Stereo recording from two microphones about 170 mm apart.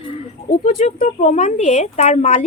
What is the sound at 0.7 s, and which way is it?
Speech, 50° left (ahead or behind).